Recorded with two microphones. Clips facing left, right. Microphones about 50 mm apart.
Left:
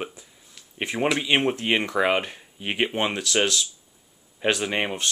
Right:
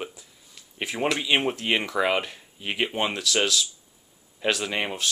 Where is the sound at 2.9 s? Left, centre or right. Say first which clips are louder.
Left 1 dB; centre.